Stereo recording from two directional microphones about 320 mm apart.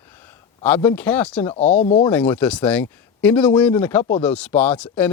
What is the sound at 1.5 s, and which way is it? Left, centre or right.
Speech, centre.